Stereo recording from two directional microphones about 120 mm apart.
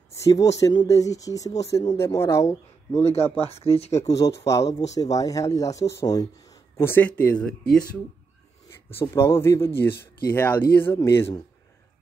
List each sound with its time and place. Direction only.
0.2 s speech: 25° left (ahead or behind)
3.0 s speech: 60° left (ahead or behind)
4.1 s speech: 25° left (ahead or behind); by 7.8 s 10° left (ahead or behind)
8.9 s speech: 25° left (ahead or behind)